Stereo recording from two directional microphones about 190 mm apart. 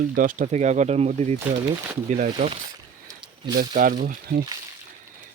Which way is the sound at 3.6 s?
45° right (ahead or behind).